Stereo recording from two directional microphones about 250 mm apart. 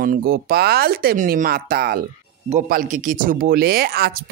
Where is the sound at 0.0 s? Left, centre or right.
Right.